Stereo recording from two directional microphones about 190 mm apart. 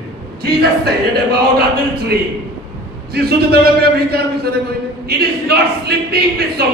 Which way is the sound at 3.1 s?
55° right (ahead or behind).